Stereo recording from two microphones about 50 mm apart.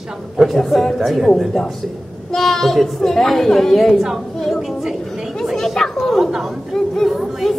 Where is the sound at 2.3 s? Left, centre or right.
Centre.